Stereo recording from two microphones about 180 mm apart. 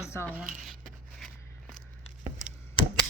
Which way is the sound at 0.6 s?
Centre (ahead or behind).